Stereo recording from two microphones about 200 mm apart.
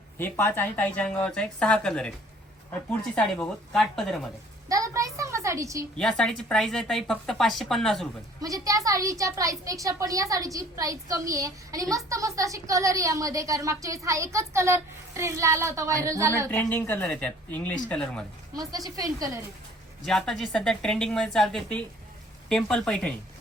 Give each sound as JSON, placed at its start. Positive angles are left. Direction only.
{"t": 0.2, "sound": "speech", "side_deg": 10}
{"t": 3.2, "sound": "speech", "side_deg": 5}
{"t": 4.7, "sound": "a woman's voice", "side_deg": -15}
{"t": 6.0, "sound": "speech", "side_deg": 5}
{"t": 8.4, "sound": "a woman's voice", "side_deg": -15}
{"t": 16.5, "sound": "speech", "side_deg": 10}
{"t": 18.5, "sound": "a woman's voice", "side_deg": -20}
{"t": 20.1, "sound": "speech", "side_deg": 0}